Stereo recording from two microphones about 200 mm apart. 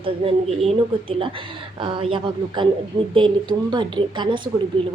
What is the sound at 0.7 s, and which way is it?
A woman's voice, 25° right (ahead or behind).